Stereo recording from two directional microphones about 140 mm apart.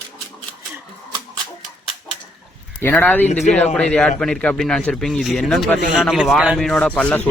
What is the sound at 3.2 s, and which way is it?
Speech, 55° left (ahead or behind).